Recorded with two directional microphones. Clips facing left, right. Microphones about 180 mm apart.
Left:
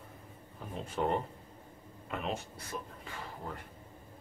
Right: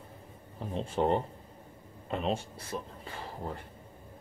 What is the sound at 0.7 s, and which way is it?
Speech, 30° right (ahead or behind).